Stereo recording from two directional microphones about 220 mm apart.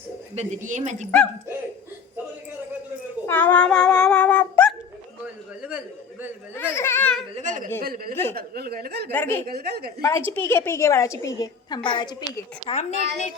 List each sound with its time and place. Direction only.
0.3 s a woman's voice: 35° right (ahead or behind)
3.2 s cat: 10° left (ahead or behind)
5.2 s a sound: 5° right (ahead or behind)
6.5 s a sound: 10° left (ahead or behind)
7.3 s a sound: 35° right (ahead or behind)
7.8 s speech: 40° right (ahead or behind)
9.1 s a woman's voice: 10° left (ahead or behind)
9.5 s speech: 45° right (ahead or behind)
10.0 s a woman's voice: 15° left (ahead or behind); by 13.3 s 30° left (ahead or behind)